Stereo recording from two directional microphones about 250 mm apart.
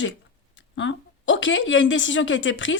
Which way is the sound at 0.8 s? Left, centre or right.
Left.